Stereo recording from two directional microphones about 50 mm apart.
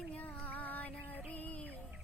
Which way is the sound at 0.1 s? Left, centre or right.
Left.